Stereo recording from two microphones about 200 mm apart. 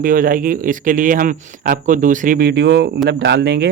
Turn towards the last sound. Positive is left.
turn(degrees=-55)  # may be behind; listen again after turning